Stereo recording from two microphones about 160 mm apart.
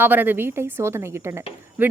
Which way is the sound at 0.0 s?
10° right (ahead or behind).